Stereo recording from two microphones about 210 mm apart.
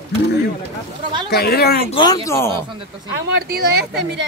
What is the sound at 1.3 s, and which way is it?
Speech, 50° left (ahead or behind).